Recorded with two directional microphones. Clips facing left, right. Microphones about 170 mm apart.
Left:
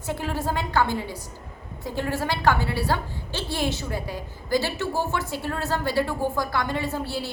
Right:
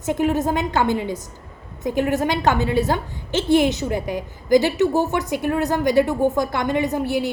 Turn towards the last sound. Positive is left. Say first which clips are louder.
# right 7 dB
turn(degrees=-15)  # may be behind; listen again after turning